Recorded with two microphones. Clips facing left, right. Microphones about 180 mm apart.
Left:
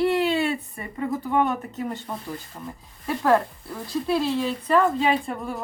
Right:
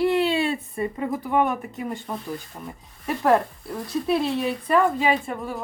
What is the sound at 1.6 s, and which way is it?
Speech, 10° right (ahead or behind).